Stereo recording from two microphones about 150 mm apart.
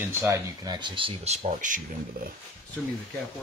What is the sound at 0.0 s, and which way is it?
Speech, 15° right (ahead or behind).